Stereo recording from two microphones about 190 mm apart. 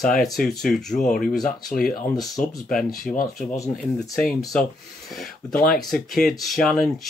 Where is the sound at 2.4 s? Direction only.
45° left (ahead or behind).